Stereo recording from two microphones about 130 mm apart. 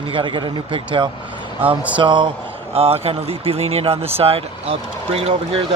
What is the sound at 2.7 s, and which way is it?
Speech, 50° right (ahead or behind).